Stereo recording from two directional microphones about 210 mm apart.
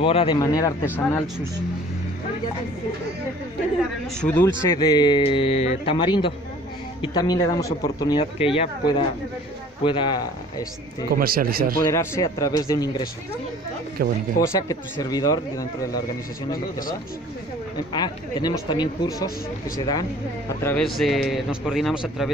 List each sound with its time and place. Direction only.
0.0 s speech: 25° left (ahead or behind); by 1.3 s 10° left (ahead or behind)
4.2 s a man's voice: 5° left (ahead or behind)
4.6 s speech: 20° left (ahead or behind)
11.1 s a man's voice: 45° right (ahead or behind)
11.9 s speech: 15° left (ahead or behind)
14.0 s a man's voice: 45° right (ahead or behind)
14.4 s speech: 15° left (ahead or behind)
17.9 s speech: 20° left (ahead or behind)
21.0 s a man's voice: centre (ahead or behind)